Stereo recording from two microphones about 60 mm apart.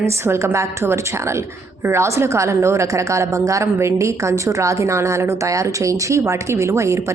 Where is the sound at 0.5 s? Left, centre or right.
Right.